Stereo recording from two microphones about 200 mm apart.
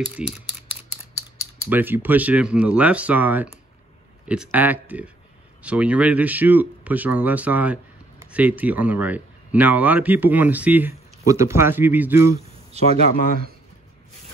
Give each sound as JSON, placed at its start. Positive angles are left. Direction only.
{"t": 0.2, "sound": "speech", "side_deg": -5}
{"t": 1.7, "sound": "speech", "side_deg": -10}
{"t": 12.7, "sound": "speech", "side_deg": -30}